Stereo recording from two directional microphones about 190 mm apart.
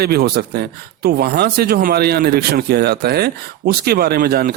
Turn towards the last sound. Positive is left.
turn(degrees=-50)  # may be behind; listen again after turning